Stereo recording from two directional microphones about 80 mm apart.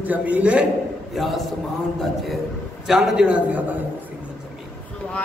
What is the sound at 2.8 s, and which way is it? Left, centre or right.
Speech, centre.